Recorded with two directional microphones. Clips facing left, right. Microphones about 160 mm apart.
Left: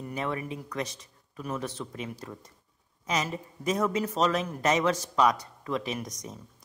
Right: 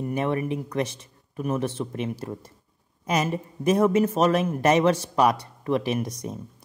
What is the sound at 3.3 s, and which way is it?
Speech, 25° right (ahead or behind).